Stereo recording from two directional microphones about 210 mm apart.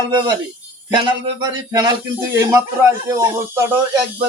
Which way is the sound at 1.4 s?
20° right (ahead or behind).